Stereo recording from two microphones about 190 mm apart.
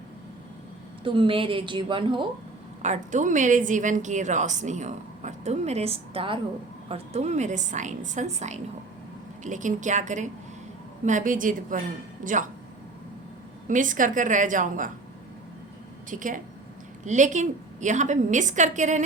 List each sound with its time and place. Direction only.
1.0 s a woman's voice: 25° right (ahead or behind)
2.8 s a woman's voice: 40° right (ahead or behind)
13.7 s a woman's voice: 45° right (ahead or behind)
16.0 s a woman's voice: 45° right (ahead or behind)